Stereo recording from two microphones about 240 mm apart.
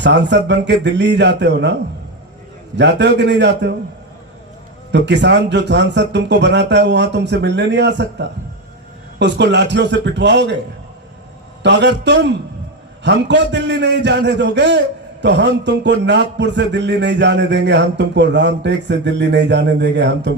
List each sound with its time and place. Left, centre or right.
0.0 s a man's voice: right
2.7 s a man's voice: right
4.9 s a man's voice: right
11.6 s a man's voice: right